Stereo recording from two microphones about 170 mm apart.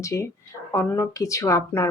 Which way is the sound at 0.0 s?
20° left (ahead or behind).